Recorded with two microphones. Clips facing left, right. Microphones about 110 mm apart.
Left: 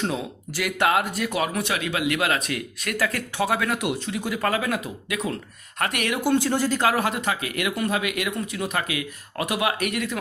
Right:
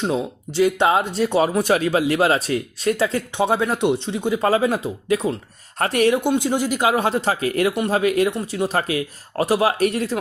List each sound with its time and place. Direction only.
0.1 s speech: 25° right (ahead or behind)
6.3 s speech: 15° right (ahead or behind)
7.0 s speech: 30° right (ahead or behind)